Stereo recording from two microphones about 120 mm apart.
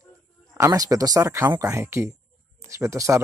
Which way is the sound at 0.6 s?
30° right (ahead or behind).